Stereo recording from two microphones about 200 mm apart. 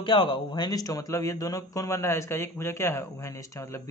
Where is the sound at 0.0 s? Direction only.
25° left (ahead or behind).